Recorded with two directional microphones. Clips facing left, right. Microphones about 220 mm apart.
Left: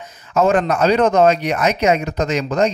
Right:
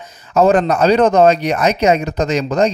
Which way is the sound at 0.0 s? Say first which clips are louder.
Right 3 dB; 35° right (ahead or behind).